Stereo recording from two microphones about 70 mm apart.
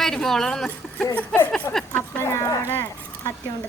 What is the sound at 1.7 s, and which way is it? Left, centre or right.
Speech, left.